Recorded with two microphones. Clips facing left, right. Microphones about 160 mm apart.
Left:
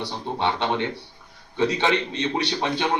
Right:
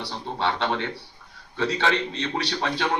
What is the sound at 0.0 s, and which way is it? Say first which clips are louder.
A man's voice: left 2 dB; 20° left (ahead or behind).